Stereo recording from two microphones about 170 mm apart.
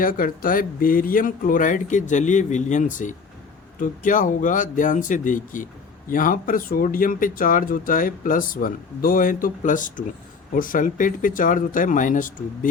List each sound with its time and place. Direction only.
0.0 s speech: 55° left (ahead or behind)